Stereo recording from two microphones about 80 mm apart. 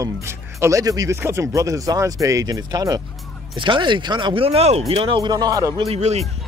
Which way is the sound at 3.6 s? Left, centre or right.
Right.